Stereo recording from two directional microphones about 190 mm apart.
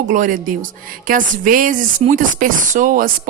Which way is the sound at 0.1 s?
45° right (ahead or behind).